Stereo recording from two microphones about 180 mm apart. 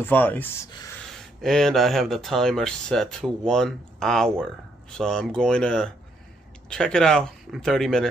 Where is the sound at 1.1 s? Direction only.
Centre (ahead or behind).